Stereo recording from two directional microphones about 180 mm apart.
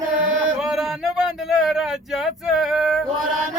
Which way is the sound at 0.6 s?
Centre (ahead or behind).